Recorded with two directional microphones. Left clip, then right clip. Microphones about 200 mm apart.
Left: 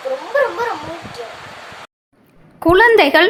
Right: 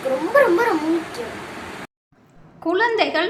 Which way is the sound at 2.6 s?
45° left (ahead or behind).